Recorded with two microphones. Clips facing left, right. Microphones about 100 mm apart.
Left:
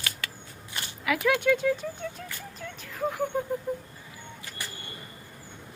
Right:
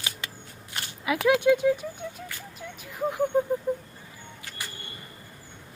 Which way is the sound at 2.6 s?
15° right (ahead or behind).